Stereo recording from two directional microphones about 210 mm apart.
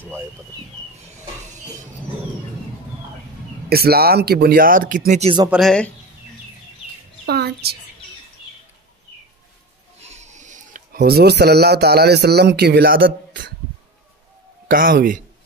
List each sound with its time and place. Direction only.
3.6 s speech: 45° right (ahead or behind)
5.5 s a woman's voice: centre (ahead or behind)
7.2 s a sound: 50° right (ahead or behind)
9.9 s speech: 30° right (ahead or behind)
14.7 s speech: 40° right (ahead or behind)